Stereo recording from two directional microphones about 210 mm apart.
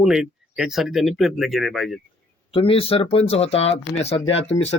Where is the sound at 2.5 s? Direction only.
25° left (ahead or behind).